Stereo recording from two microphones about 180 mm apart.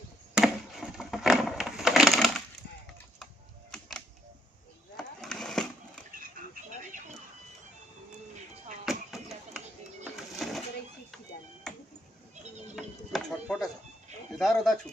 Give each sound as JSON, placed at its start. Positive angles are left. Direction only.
{"t": 0.3, "sound": "wood", "side_deg": 0}
{"t": 3.7, "sound": "music", "side_deg": 5}
{"t": 4.9, "sound": "a sound", "side_deg": 0}
{"t": 6.1, "sound": "oink", "side_deg": -50}
{"t": 8.9, "sound": "chop", "side_deg": 0}
{"t": 10.0, "sound": "music", "side_deg": 0}
{"t": 12.7, "sound": "music", "side_deg": 0}
{"t": 14.3, "sound": "speech", "side_deg": 0}